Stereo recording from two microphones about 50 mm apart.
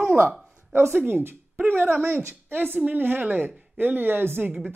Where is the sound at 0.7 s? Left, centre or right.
Right.